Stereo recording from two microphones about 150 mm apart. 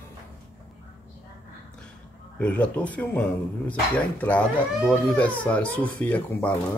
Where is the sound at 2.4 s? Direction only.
10° left (ahead or behind).